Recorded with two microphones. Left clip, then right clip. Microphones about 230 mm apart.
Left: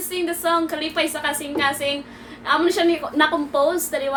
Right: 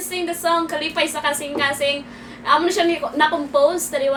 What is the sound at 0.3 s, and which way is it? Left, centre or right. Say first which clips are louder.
A woman's voice: right 1 dB; centre.